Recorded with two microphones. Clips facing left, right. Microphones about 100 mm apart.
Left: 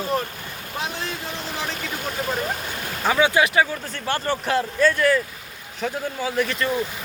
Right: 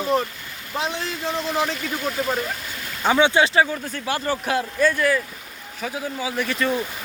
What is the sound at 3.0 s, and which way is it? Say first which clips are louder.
Speech: right 1 dB; 25° right (ahead or behind).